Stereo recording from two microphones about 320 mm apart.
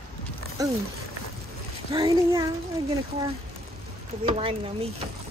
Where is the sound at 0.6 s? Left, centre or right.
Centre.